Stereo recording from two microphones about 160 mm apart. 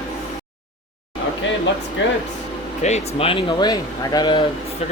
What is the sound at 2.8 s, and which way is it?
Speech, 40° left (ahead or behind).